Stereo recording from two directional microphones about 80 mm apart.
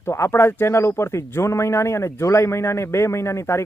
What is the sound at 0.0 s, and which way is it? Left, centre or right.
Speech, left.